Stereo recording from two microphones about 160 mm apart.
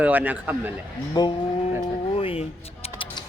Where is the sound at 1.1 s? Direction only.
30° left (ahead or behind).